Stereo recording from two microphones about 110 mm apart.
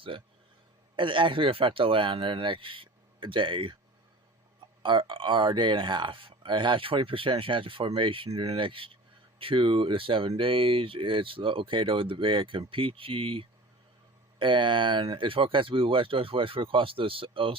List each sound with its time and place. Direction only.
0.1 s speech: 50° right (ahead or behind)
4.8 s speech: 50° right (ahead or behind)